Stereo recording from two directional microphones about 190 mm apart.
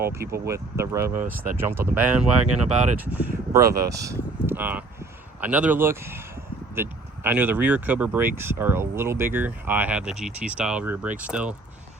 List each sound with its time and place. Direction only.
0.1 s speech: 15° right (ahead or behind)